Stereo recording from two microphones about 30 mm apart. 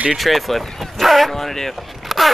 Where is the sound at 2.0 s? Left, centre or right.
Centre.